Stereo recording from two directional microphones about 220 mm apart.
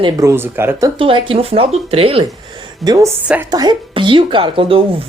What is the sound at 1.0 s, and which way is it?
Speech, 25° right (ahead or behind).